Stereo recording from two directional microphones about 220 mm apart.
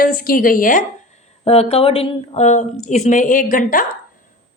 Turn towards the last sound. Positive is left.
turn(degrees=40)  # may be behind; listen again after turning